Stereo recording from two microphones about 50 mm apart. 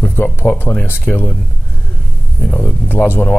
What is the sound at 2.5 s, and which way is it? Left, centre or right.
Speech, left.